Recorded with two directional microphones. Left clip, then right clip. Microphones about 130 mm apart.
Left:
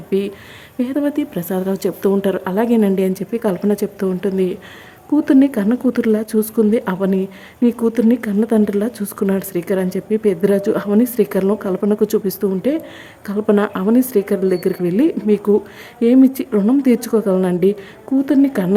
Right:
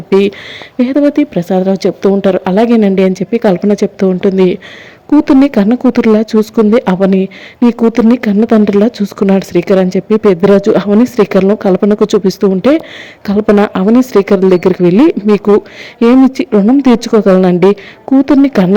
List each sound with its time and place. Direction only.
0.1 s a woman's voice: 35° right (ahead or behind)